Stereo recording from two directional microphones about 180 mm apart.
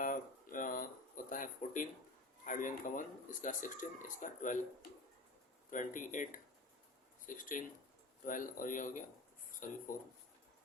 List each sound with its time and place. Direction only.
0.0 s a sound: 50° left (ahead or behind)
2.4 s speech: 45° left (ahead or behind)
5.7 s speech: 45° left (ahead or behind)